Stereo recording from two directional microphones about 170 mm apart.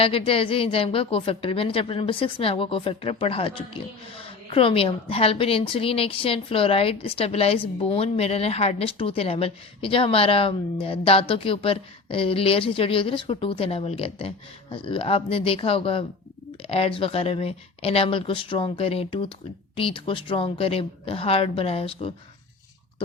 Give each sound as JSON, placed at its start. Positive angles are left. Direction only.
{"t": 0.0, "sound": "a woman's voice", "side_deg": 35}